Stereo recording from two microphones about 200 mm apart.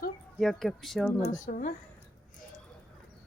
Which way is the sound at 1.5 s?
40° left (ahead or behind).